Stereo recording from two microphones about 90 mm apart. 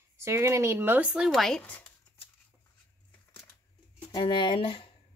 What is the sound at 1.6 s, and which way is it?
Speech, 15° left (ahead or behind).